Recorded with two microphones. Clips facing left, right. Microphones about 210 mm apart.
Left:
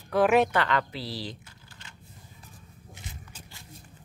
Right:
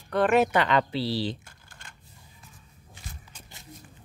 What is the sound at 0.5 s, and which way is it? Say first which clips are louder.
Speech: right 3 dB; 20° right (ahead or behind).